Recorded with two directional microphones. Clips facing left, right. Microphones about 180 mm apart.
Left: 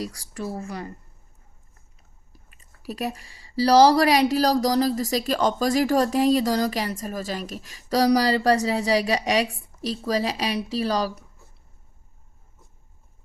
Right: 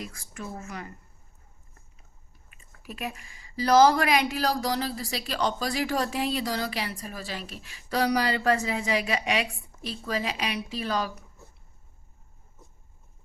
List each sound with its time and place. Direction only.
0.0 s speech: 35° left (ahead or behind)
2.5 s speech: 35° left (ahead or behind)